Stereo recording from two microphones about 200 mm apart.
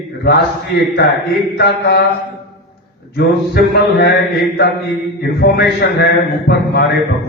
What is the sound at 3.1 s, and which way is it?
A man's voice, 55° left (ahead or behind).